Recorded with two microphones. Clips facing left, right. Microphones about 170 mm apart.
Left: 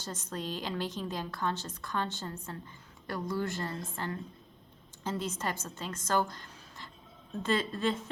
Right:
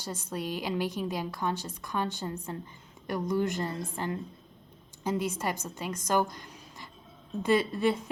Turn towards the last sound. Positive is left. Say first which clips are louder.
# right 5 dB
turn(degrees=-15)  # may be behind; listen again after turning